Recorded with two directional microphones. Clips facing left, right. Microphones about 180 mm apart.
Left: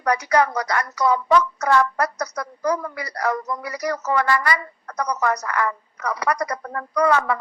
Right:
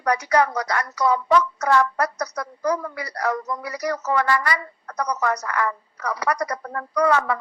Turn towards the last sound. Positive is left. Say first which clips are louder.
# left 1 dB
turn(degrees=-35)  # may be behind; listen again after turning